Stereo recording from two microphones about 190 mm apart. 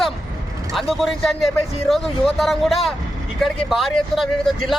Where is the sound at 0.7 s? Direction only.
Centre (ahead or behind).